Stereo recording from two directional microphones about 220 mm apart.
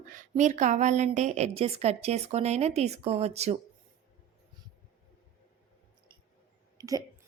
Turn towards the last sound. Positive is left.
turn(degrees=-15)  # may be behind; listen again after turning